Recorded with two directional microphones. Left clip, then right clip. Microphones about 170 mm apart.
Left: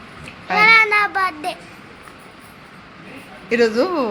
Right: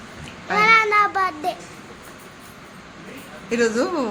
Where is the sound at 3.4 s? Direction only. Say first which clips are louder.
Left 4 dB; 15° left (ahead or behind).